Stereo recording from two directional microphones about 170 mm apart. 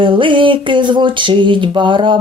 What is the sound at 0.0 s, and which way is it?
Speech, 30° right (ahead or behind).